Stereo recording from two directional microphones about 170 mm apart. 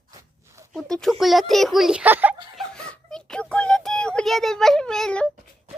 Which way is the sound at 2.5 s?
5° left (ahead or behind).